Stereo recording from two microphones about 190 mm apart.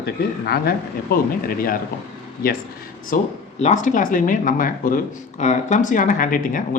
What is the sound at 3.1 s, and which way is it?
Speech, 45° left (ahead or behind).